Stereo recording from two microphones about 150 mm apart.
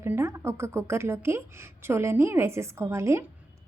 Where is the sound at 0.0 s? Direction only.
15° right (ahead or behind).